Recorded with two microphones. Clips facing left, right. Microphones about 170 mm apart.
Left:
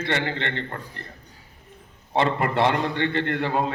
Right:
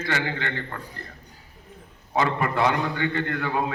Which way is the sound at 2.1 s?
30° left (ahead or behind).